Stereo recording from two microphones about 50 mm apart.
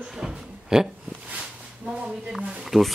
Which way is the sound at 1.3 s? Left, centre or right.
Right.